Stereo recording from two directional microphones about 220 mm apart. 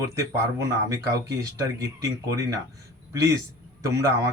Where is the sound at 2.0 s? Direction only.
15° right (ahead or behind).